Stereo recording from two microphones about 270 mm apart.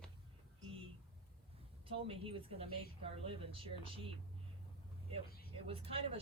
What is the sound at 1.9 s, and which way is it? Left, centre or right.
A man's voice, centre.